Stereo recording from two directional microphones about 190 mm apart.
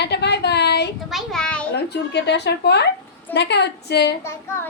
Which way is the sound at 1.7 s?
60° left (ahead or behind).